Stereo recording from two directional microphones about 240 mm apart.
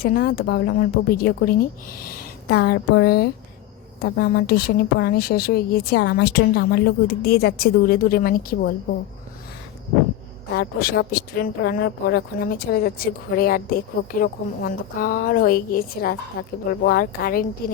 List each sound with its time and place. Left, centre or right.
0.0 s a woman's voice: left
10.5 s a woman's voice: left